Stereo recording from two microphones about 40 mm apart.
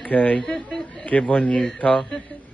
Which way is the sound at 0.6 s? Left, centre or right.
Centre.